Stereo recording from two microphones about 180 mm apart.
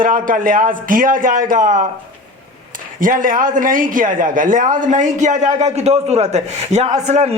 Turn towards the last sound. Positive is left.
turn(degrees=-40)  # may be behind; listen again after turning